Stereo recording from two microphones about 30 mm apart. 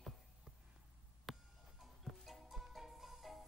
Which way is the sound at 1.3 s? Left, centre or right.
Centre.